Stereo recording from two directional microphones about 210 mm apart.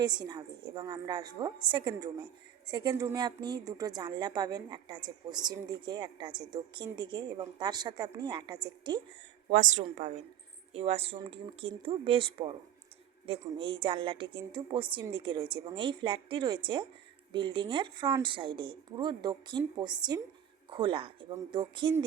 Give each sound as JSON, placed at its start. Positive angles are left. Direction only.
{"t": 0.0, "sound": "a woman's voice", "side_deg": -20}
{"t": 9.5, "sound": "a woman's voice", "side_deg": -35}